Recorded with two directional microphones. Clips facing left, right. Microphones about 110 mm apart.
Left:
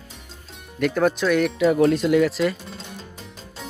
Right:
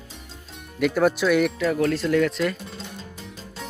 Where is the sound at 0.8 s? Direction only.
5° right (ahead or behind).